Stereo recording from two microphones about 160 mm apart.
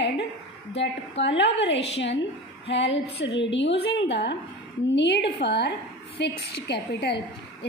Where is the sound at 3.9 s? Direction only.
90° left.